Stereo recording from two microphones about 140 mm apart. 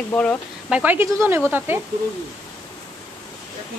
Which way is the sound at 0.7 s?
10° right (ahead or behind).